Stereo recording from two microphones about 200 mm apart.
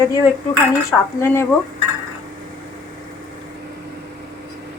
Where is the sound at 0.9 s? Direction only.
10° left (ahead or behind).